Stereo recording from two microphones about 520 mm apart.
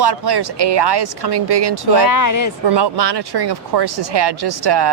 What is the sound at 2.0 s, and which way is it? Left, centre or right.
Speech, left.